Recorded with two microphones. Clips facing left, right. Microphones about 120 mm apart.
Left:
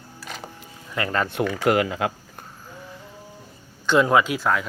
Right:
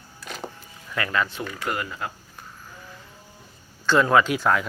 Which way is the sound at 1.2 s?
75° left (ahead or behind).